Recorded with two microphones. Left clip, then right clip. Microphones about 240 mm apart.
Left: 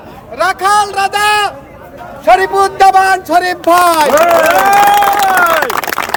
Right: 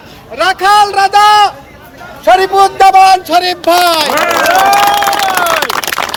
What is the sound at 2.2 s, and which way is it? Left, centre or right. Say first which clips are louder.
Speech: right 2 dB; right.